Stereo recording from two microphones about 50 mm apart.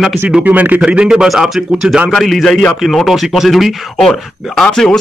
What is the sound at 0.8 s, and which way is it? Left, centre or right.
Speech, centre.